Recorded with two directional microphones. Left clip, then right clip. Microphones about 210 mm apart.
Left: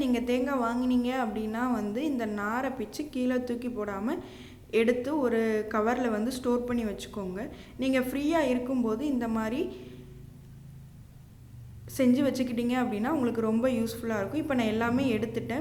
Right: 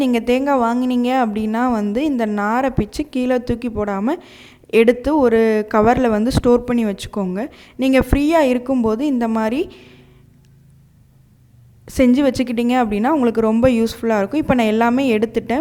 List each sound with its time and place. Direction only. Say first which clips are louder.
0.0 s a woman's voice: right 11 dB; 50° right (ahead or behind)
11.9 s a woman's voice: right 11 dB; 45° right (ahead or behind)